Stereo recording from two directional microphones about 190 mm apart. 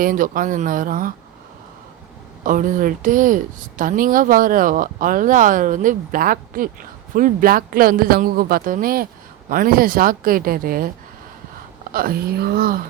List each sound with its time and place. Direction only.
0.0 s speech: 45° right (ahead or behind)
2.4 s speech: 45° right (ahead or behind)